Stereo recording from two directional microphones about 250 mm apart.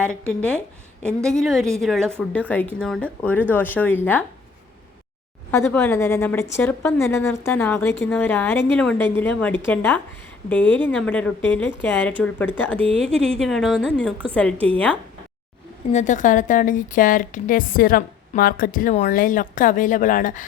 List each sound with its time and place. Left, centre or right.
0.0 s a woman's voice: centre
5.5 s a woman's voice: centre
15.9 s a woman's voice: left